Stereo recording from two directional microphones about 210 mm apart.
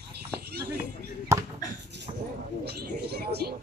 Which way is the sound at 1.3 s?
15° right (ahead or behind).